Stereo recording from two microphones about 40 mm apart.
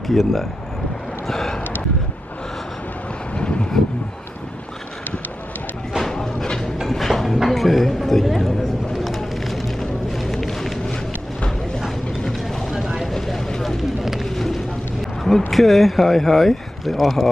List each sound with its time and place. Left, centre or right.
0.0 s speech: centre
1.2 s boat: centre
3.3 s vehicle: left
6.0 s a sound: centre
6.9 s a sound: centre
12.7 s vehicle: centre
13.5 s vehicle: centre
15.2 s speech: centre